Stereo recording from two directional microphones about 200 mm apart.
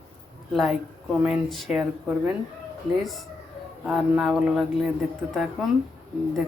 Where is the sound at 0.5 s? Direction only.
Centre (ahead or behind).